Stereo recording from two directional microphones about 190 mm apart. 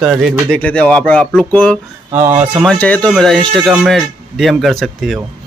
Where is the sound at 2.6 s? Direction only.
5° left (ahead or behind).